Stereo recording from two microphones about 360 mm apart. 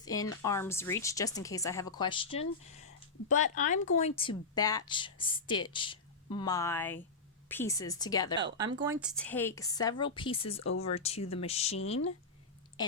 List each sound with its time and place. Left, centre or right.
0.0 s a woman's voice: centre
8.5 s a woman's voice: centre
10.6 s speech: left
10.9 s a woman's voice: centre